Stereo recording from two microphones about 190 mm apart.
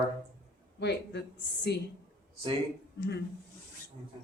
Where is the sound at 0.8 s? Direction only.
60° left (ahead or behind).